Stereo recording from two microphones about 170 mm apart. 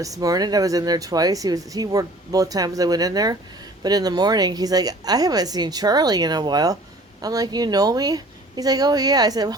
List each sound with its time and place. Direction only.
0.0 s speech: 20° right (ahead or behind)